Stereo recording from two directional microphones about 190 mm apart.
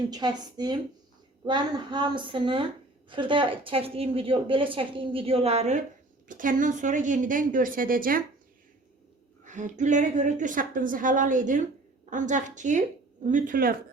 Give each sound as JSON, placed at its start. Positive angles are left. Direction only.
{"t": 0.1, "sound": "a woman's voice", "side_deg": -20}
{"t": 9.4, "sound": "a woman's voice", "side_deg": -40}